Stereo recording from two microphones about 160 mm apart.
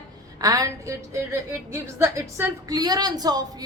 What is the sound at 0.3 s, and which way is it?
A woman's voice, 20° right (ahead or behind).